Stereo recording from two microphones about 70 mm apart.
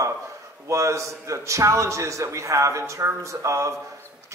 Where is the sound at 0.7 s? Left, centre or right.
Right.